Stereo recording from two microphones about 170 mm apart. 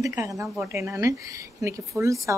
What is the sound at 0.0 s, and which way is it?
A woman's voice, 15° right (ahead or behind).